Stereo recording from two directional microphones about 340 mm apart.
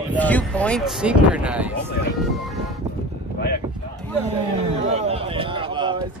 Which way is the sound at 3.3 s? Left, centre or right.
Left.